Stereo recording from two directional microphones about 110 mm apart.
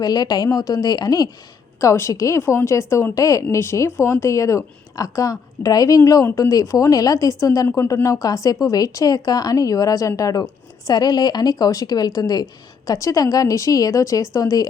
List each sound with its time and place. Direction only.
0.0 s a woman's voice: 35° left (ahead or behind)